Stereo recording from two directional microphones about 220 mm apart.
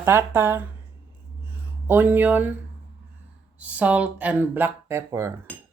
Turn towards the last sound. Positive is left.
turn(degrees=-10)  # may be behind; listen again after turning